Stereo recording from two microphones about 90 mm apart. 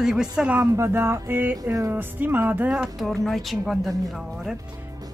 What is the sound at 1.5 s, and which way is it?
Speech, 35° right (ahead or behind).